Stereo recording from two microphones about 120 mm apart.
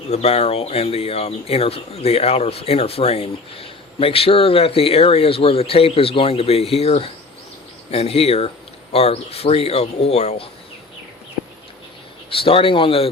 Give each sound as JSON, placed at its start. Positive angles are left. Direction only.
{"t": 0.1, "sound": "speech", "side_deg": 60}
{"t": 12.3, "sound": "speech", "side_deg": 50}